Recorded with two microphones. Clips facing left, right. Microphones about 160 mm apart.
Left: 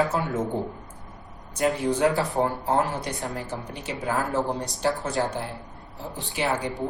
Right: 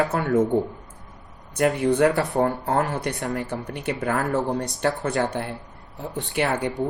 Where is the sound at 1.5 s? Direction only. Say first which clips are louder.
Right 4 dB; 60° right (ahead or behind).